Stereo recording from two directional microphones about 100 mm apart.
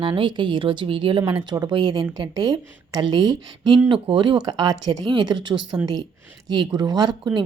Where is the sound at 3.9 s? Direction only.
55° right (ahead or behind).